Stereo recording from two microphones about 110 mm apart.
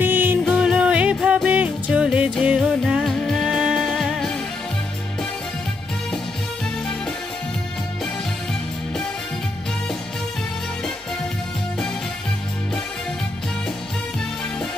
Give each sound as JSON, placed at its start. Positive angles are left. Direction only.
{"t": 0.0, "sound": "music", "side_deg": -15}
{"t": 3.1, "sound": "music", "side_deg": 5}